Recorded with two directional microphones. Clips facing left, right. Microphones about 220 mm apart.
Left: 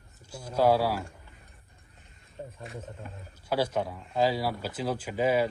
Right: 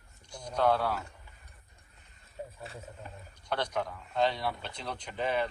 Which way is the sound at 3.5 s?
5° left (ahead or behind).